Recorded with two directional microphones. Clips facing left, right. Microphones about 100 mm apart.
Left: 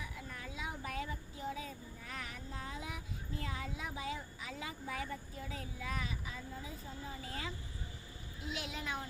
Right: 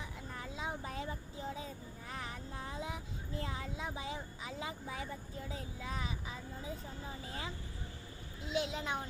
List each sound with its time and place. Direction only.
0.0 s child singing: 25° right (ahead or behind)
7.3 s speech: 25° right (ahead or behind)